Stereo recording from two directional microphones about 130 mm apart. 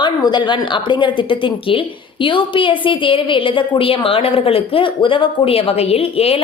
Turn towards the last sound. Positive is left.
turn(degrees=50)  # may be behind; listen again after turning